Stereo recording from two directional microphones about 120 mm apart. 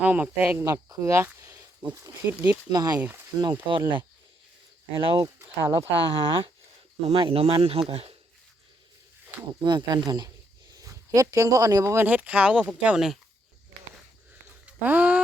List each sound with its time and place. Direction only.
0.0 s speech: 10° right (ahead or behind)
0.6 s speech: 25° right (ahead or behind)
2.6 s speech: 35° right (ahead or behind); by 5.2 s 50° right (ahead or behind)
5.2 s speech: 25° right (ahead or behind)
5.8 s speech: 45° right (ahead or behind)
9.6 s speech: 35° right (ahead or behind); by 13.1 s 5° right (ahead or behind)
14.8 s speech: 15° right (ahead or behind)